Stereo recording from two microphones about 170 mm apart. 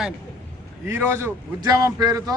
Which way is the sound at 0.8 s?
15° right (ahead or behind).